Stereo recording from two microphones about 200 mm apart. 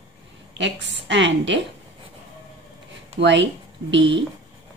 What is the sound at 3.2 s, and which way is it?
A woman's voice, 60° right (ahead or behind).